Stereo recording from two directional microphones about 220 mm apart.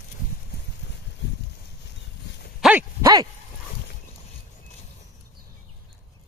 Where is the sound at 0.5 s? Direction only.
45° left (ahead or behind).